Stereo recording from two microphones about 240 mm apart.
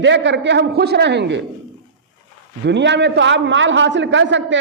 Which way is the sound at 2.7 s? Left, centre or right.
Right.